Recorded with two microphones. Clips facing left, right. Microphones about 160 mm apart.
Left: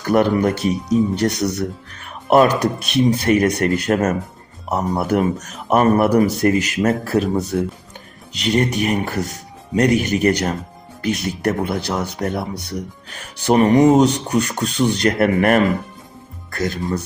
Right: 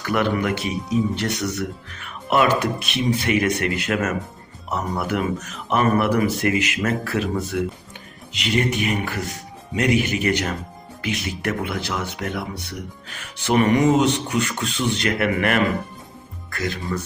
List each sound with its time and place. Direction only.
0.0 s speech: 40° left (ahead or behind)